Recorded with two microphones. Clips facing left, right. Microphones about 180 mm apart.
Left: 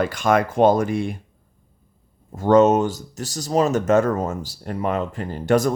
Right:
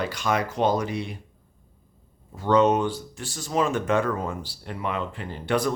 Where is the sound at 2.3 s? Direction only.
45° left (ahead or behind).